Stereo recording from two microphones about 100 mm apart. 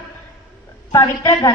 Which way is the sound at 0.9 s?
40° left (ahead or behind).